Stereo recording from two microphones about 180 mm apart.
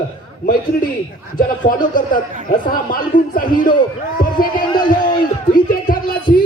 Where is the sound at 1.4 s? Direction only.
50° left (ahead or behind).